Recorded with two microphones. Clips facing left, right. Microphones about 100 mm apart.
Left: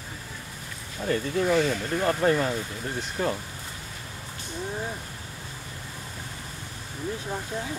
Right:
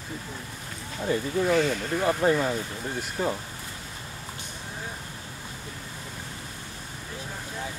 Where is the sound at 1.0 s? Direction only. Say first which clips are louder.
Even; 10° right (ahead or behind).